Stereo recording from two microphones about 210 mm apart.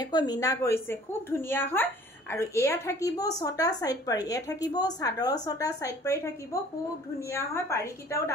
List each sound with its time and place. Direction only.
0.0 s a woman's voice: 20° left (ahead or behind)